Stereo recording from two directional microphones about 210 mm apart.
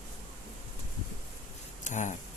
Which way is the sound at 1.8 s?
35° left (ahead or behind).